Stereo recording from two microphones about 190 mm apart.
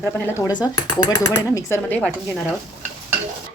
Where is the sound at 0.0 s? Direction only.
15° left (ahead or behind).